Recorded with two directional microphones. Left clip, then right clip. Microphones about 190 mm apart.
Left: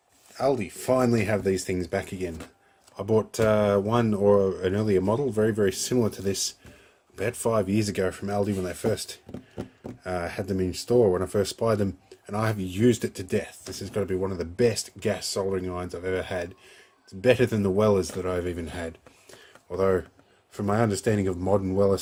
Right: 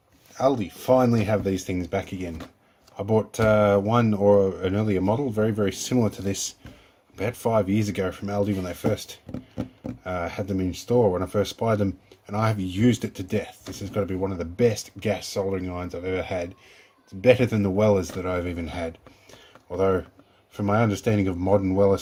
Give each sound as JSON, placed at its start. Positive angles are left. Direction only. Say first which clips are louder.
{"t": 0.3, "sound": "speech", "louder": "right 2 dB", "side_deg": 20}